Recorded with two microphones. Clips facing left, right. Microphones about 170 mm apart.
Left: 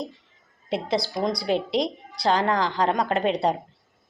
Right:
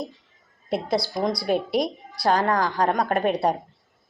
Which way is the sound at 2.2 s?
45° right (ahead or behind).